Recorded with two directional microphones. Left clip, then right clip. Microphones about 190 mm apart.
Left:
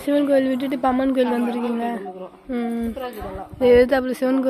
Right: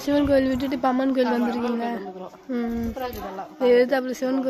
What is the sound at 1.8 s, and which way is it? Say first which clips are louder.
A woman's voice: left 2 dB; 15° left (ahead or behind).